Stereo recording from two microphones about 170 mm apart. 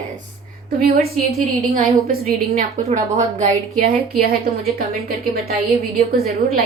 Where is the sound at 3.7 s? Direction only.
60° right (ahead or behind).